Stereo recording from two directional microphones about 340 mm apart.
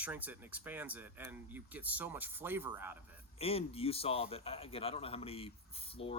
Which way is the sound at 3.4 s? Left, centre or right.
Centre.